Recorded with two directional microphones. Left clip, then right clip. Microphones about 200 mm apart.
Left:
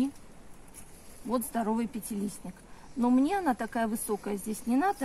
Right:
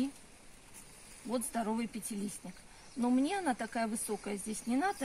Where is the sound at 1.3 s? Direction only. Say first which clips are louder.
Left 5 dB; 15° right (ahead or behind).